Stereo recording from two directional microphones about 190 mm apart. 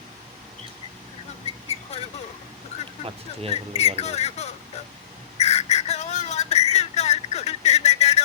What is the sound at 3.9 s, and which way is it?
Speech, 35° left (ahead or behind).